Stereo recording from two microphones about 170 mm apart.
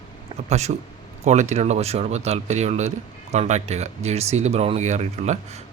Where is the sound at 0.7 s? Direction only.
45° right (ahead or behind).